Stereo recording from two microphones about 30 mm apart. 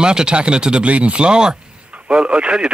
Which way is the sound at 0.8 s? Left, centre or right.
Right.